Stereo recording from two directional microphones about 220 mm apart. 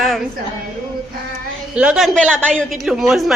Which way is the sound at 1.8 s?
5° right (ahead or behind).